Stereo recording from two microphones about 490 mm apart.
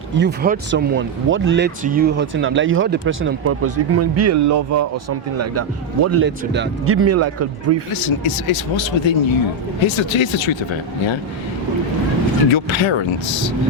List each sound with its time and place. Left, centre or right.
0.2 s speech: centre; by 4.9 s right
6.1 s speech: right
8.2 s speech: left
12.5 s speech: left